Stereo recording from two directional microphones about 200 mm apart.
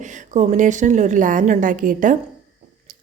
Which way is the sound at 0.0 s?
40° right (ahead or behind).